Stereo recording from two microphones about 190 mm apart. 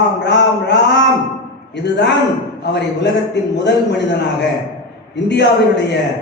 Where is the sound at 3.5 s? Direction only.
65° left (ahead or behind).